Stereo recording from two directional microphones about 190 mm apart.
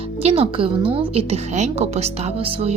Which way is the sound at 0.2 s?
30° right (ahead or behind).